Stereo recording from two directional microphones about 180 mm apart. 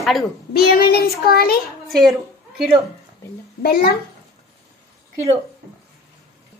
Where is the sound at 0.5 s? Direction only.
55° left (ahead or behind).